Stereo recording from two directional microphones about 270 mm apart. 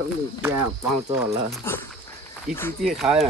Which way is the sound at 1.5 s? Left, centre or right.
Centre.